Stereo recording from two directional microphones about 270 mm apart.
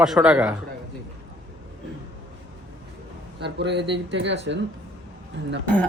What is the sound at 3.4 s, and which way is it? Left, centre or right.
Speech, right.